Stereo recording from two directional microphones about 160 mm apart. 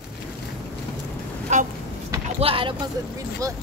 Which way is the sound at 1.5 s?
45° right (ahead or behind).